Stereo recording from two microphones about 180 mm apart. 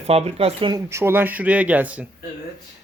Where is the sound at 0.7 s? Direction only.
15° right (ahead or behind).